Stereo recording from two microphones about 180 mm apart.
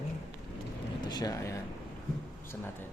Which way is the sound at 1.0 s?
20° left (ahead or behind).